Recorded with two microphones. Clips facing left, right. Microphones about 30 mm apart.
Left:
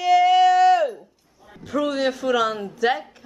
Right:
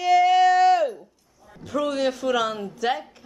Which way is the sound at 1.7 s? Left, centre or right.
Centre.